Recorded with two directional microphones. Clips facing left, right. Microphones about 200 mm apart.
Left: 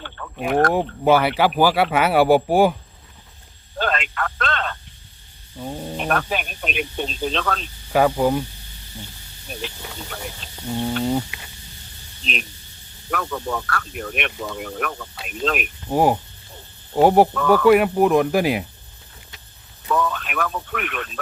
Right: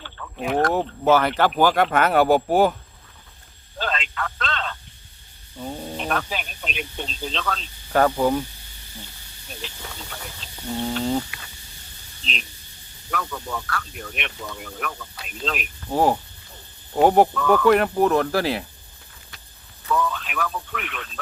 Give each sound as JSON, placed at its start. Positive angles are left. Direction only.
{"t": 0.4, "sound": "speech", "side_deg": 55}
{"t": 0.7, "sound": "speech", "side_deg": 10}
{"t": 3.8, "sound": "telephone", "side_deg": 55}
{"t": 5.5, "sound": "speech", "side_deg": 10}
{"t": 6.0, "sound": "speech", "side_deg": 55}
{"t": 7.9, "sound": "speech", "side_deg": 10}
{"t": 10.7, "sound": "speech", "side_deg": 5}
{"t": 11.3, "sound": "snake", "side_deg": 20}
{"t": 12.2, "sound": "speech", "side_deg": 55}
{"t": 15.9, "sound": "speech", "side_deg": 10}
{"t": 17.3, "sound": "speech", "side_deg": 45}
{"t": 17.7, "sound": "speech", "side_deg": 10}
{"t": 19.9, "sound": "speech", "side_deg": 55}